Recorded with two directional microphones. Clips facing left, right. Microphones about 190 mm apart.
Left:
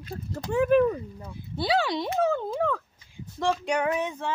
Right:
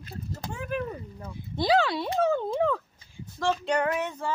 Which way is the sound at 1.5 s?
5° left (ahead or behind).